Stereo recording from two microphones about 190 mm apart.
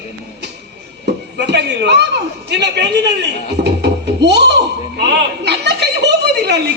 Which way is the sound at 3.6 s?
60° right (ahead or behind).